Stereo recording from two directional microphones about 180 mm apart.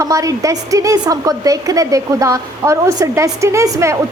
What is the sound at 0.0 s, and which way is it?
A woman's voice, 20° right (ahead or behind).